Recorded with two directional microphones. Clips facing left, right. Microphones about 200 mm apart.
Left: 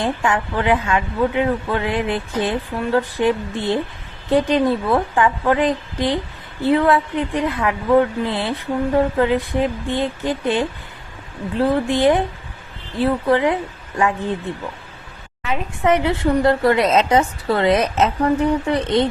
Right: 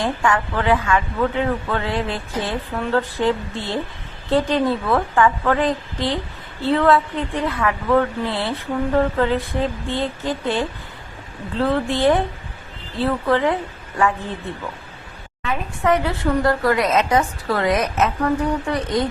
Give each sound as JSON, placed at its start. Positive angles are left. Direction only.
{"t": 0.0, "sound": "a woman's voice", "side_deg": 20}